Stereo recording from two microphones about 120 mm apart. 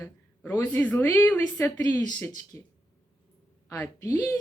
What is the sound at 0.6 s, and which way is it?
A woman's voice, 15° left (ahead or behind).